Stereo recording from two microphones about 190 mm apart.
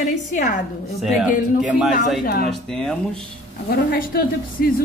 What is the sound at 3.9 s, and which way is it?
Speech, 50° left (ahead or behind).